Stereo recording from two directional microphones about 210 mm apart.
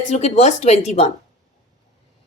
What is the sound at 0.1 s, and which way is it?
A woman's voice, 30° left (ahead or behind).